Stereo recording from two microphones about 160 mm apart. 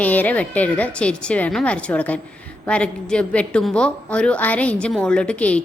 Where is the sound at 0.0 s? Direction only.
10° left (ahead or behind).